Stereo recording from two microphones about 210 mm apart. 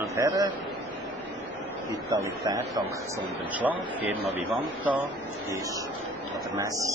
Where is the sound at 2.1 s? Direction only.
15° right (ahead or behind).